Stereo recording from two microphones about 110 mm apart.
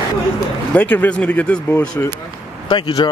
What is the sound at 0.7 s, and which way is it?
Speech, 15° left (ahead or behind).